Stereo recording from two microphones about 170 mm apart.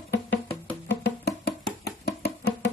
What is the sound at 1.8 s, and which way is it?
Music, 70° left (ahead or behind).